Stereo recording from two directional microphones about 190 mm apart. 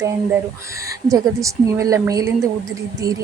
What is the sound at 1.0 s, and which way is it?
A woman's voice, 15° right (ahead or behind).